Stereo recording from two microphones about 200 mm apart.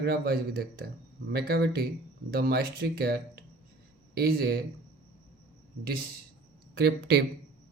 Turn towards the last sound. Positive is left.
turn(degrees=-55)  # may be behind; listen again after turning